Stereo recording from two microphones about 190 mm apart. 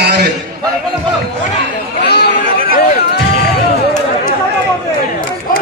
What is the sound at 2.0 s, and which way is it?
Chatter, 60° left (ahead or behind).